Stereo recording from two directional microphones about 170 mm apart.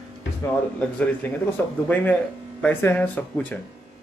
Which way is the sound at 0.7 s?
10° left (ahead or behind).